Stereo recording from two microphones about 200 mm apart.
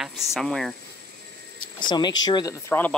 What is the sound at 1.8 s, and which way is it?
Speech, 20° left (ahead or behind).